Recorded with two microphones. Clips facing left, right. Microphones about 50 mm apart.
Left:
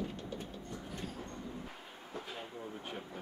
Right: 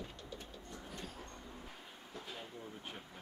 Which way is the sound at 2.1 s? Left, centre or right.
Centre.